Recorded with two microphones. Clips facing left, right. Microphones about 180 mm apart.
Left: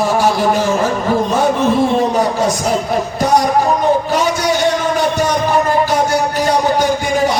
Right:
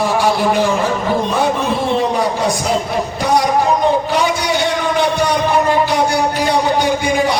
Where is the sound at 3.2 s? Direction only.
45° left (ahead or behind).